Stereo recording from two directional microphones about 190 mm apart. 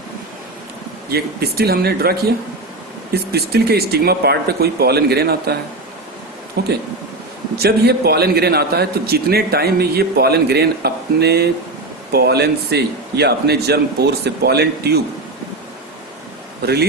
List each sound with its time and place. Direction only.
1.1 s a man's voice: 55° right (ahead or behind)
6.6 s a man's voice: 55° right (ahead or behind)